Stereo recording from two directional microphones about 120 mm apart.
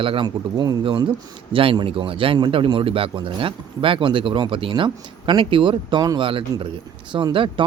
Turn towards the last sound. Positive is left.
turn(degrees=-45)  # may be behind; listen again after turning